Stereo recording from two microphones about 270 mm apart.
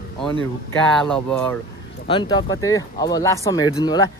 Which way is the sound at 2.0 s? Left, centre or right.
Centre.